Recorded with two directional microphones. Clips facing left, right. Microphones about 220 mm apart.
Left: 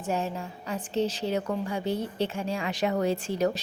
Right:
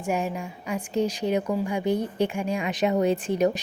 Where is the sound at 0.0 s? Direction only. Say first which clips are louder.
Right 3 dB; 15° right (ahead or behind).